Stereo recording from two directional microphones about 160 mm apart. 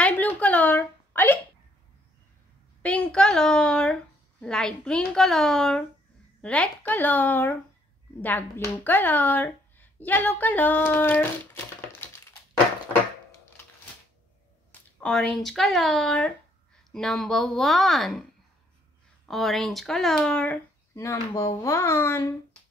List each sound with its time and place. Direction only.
0.0 s a sound: 10° left (ahead or behind)
2.8 s a woman's voice: 5° left (ahead or behind)
14.7 s speech: 5° left (ahead or behind)
19.2 s a woman's voice: centre (ahead or behind)